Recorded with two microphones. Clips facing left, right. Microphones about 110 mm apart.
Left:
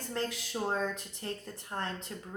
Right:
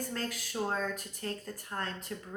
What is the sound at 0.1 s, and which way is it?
Speech, 20° left (ahead or behind).